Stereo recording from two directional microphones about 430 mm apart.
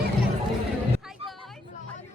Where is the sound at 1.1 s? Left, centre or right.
Centre.